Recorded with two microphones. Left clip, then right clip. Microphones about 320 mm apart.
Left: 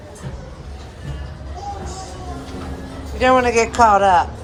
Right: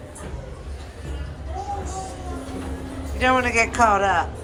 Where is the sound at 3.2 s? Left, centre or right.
Centre.